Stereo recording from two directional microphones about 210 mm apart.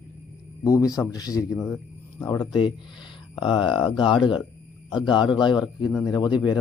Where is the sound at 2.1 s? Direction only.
15° left (ahead or behind).